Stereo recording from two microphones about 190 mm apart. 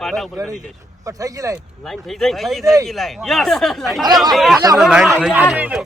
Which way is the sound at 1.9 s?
Centre (ahead or behind).